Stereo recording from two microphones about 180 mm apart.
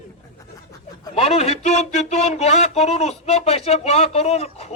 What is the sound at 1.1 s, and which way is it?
Speech, 35° left (ahead or behind).